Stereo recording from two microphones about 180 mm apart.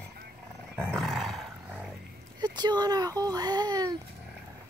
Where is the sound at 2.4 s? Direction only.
25° right (ahead or behind).